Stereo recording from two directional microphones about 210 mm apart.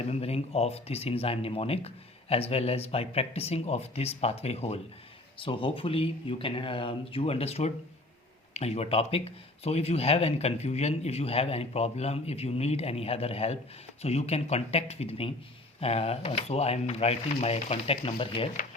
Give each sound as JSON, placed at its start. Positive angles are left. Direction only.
{"t": 0.1, "sound": "speech", "side_deg": 30}